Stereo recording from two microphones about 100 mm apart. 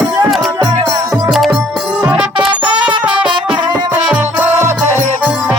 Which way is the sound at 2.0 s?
15° right (ahead or behind).